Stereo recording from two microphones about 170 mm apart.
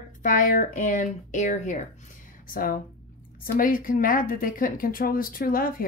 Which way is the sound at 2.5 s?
55° left (ahead or behind).